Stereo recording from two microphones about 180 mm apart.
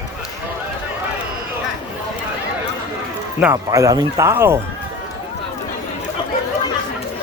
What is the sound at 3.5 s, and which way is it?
Speech, 20° right (ahead or behind).